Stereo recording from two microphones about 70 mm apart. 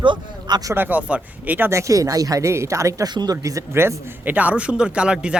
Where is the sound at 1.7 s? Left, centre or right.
Right.